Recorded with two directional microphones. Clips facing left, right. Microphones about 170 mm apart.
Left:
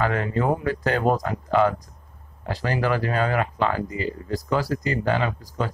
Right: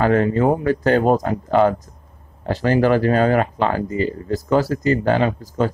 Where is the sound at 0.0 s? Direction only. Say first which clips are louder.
Right 7 dB; 40° right (ahead or behind).